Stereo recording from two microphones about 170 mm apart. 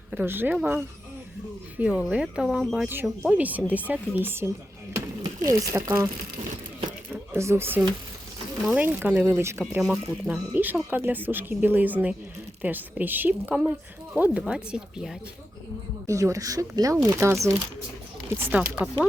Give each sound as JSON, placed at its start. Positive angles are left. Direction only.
{"t": 0.1, "sound": "speech", "side_deg": -10}
{"t": 1.8, "sound": "speech", "side_deg": -5}
{"t": 4.9, "sound": "a sound", "side_deg": -20}
{"t": 5.7, "sound": "speech", "side_deg": -20}
{"t": 7.1, "sound": "speech", "side_deg": -15}
{"t": 9.8, "sound": "speech", "side_deg": 0}
{"t": 16.0, "sound": "speech", "side_deg": -20}